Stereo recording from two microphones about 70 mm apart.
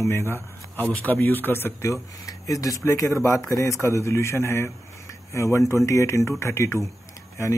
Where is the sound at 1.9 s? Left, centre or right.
Left.